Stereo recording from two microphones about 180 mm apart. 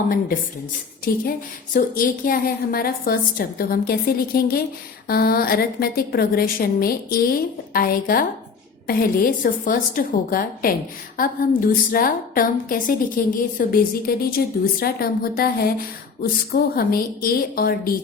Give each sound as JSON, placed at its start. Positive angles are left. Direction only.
{"t": 1.1, "sound": "a woman's voice", "side_deg": 55}